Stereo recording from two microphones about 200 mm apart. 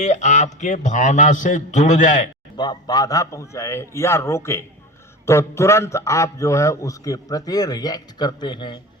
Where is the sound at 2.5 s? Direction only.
20° left (ahead or behind).